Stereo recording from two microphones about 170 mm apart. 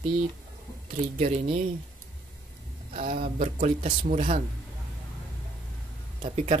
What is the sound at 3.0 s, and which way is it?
Speech, 55° right (ahead or behind).